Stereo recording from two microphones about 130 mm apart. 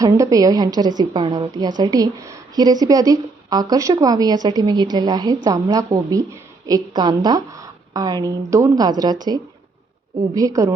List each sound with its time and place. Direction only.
0.0 s a woman's voice: 25° right (ahead or behind)